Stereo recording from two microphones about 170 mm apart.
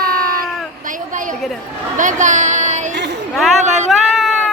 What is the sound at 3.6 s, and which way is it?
Speech, 45° right (ahead or behind).